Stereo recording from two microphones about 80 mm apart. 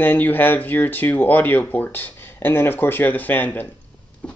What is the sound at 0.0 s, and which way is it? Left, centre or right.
Speech, left.